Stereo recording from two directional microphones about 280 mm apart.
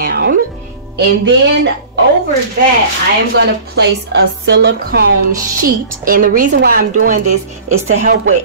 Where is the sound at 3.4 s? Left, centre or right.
Right.